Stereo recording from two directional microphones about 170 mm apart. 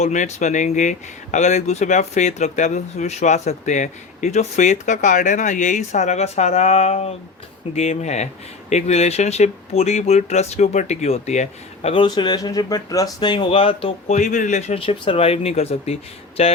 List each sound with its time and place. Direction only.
0.0 s speech: 45° left (ahead or behind)